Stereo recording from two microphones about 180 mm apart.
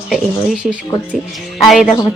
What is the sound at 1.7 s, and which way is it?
Speech, centre (ahead or behind).